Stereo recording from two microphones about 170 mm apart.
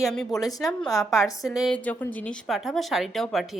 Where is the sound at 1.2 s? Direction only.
20° left (ahead or behind).